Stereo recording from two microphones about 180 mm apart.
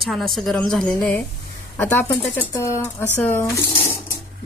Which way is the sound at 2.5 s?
15° left (ahead or behind).